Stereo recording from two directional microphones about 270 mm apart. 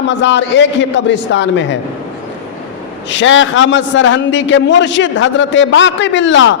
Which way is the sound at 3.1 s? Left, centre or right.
Left.